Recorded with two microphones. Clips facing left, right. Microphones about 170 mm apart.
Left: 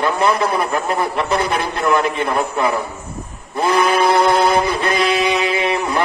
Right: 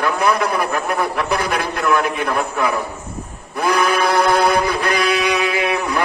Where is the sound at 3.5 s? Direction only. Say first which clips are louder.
Left 2 dB; 25° left (ahead or behind).